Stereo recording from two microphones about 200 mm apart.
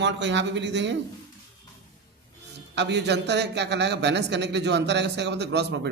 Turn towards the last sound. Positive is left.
turn(degrees=-60)  # may be behind; listen again after turning